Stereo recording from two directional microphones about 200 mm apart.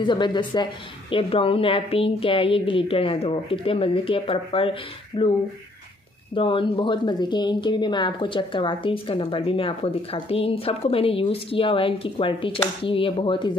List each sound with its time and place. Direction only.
0.0 s a woman's voice: 20° left (ahead or behind)
6.3 s a woman's voice: 25° left (ahead or behind)